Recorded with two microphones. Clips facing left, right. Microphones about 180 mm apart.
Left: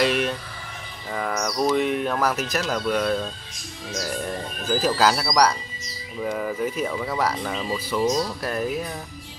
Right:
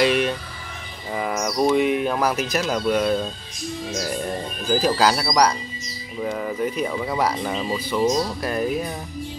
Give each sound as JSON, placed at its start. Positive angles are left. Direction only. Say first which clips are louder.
{"t": 0.0, "sound": "a sound", "louder": "right 3 dB", "side_deg": 0}
{"t": 1.1, "sound": "speech", "louder": "right 2 dB", "side_deg": -10}
{"t": 4.6, "sound": "speech", "louder": "right 1 dB", "side_deg": 0}
{"t": 8.4, "sound": "speech", "louder": "right 3 dB", "side_deg": 0}